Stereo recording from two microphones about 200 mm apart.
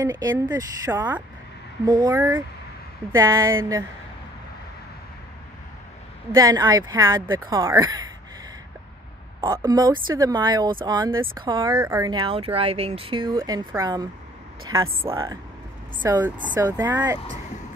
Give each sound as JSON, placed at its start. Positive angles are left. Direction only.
{"t": 0.0, "sound": "speech", "side_deg": -20}
{"t": 6.3, "sound": "speech", "side_deg": -20}
{"t": 9.4, "sound": "speech", "side_deg": -15}
{"t": 15.0, "sound": "speech", "side_deg": -15}